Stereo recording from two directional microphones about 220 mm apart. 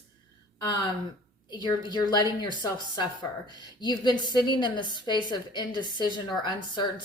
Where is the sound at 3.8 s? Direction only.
20° left (ahead or behind).